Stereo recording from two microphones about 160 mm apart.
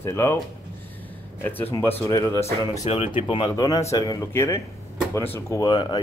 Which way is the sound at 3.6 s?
20° left (ahead or behind).